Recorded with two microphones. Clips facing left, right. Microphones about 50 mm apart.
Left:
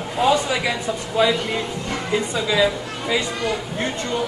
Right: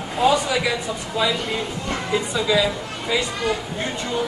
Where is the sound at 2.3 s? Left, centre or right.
Centre.